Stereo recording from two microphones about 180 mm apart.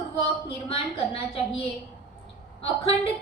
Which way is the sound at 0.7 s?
30° left (ahead or behind).